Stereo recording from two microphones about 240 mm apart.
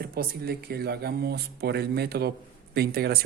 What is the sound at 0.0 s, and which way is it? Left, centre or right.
A woman's voice, right.